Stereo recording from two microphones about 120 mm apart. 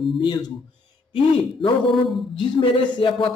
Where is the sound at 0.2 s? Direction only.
35° left (ahead or behind).